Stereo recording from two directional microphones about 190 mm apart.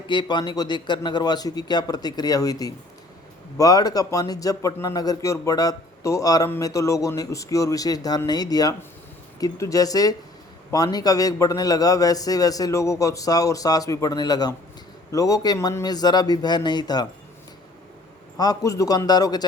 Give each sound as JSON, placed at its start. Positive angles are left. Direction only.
{"t": 0.1, "sound": "a man's voice", "side_deg": 25}
{"t": 18.3, "sound": "a man's voice", "side_deg": 20}